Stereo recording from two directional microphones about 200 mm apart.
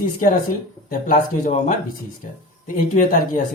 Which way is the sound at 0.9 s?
40° left (ahead or behind).